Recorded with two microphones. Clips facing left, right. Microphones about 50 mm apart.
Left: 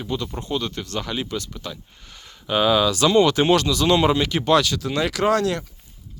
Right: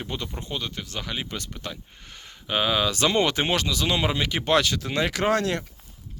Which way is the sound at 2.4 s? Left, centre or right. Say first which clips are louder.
Left 5 dB; centre.